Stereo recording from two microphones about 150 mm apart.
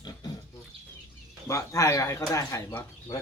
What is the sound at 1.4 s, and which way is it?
Speech, 20° left (ahead or behind).